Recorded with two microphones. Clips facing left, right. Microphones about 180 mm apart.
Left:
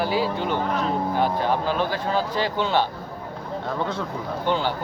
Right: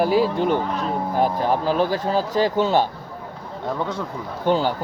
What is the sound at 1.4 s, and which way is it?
Speech, 40° right (ahead or behind).